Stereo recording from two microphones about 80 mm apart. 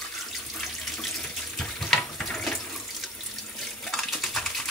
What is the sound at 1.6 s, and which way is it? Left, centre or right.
Water tap, centre.